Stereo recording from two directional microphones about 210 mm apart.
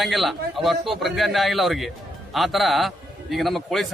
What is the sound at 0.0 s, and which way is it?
A man's voice, centre (ahead or behind).